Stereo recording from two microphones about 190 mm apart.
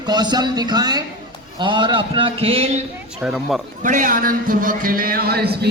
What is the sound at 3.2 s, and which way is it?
Speech, centre (ahead or behind).